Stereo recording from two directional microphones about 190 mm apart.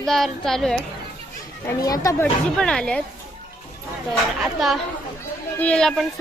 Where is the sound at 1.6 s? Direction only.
20° left (ahead or behind).